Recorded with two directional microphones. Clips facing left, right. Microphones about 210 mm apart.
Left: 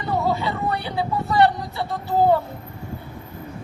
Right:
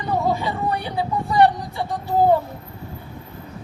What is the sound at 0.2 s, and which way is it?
Speech, 15° right (ahead or behind).